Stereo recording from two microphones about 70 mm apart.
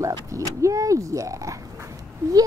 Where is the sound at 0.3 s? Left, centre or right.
Right.